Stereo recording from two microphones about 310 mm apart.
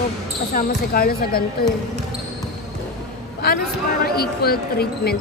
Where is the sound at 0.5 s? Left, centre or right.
Left.